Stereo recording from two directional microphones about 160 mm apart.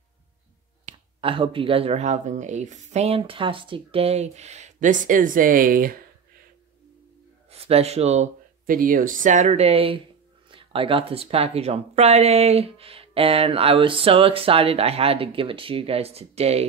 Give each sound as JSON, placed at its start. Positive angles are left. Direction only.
{"t": 0.9, "sound": "finger snapping", "side_deg": -50}
{"t": 1.2, "sound": "speech", "side_deg": -35}
{"t": 7.5, "sound": "speech", "side_deg": -40}